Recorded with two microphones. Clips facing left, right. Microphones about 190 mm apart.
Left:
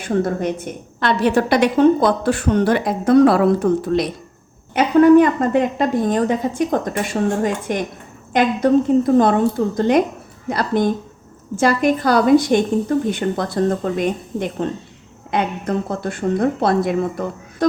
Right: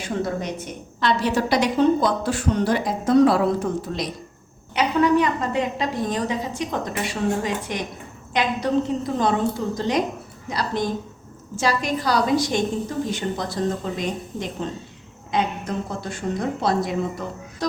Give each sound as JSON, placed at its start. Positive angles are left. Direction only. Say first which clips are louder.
{"t": 0.0, "sound": "a woman's voice", "louder": "left 6 dB", "side_deg": 55}
{"t": 4.7, "sound": "a woman's voice", "louder": "left 8 dB", "side_deg": 50}